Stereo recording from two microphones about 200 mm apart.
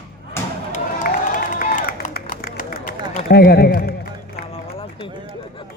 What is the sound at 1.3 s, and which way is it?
Run, 40° left (ahead or behind).